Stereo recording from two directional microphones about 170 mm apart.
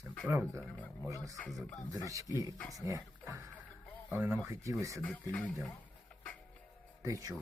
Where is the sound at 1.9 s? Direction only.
20° right (ahead or behind).